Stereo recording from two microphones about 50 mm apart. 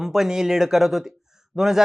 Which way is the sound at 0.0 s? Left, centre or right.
Centre.